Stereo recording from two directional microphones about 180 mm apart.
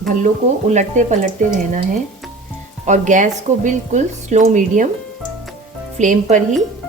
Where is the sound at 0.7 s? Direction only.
40° right (ahead or behind).